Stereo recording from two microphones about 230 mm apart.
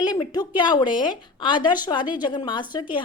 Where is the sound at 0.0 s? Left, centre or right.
Centre.